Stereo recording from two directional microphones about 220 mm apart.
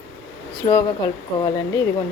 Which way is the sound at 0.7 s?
15° left (ahead or behind).